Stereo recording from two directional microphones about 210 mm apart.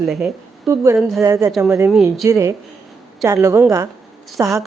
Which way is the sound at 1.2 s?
15° right (ahead or behind).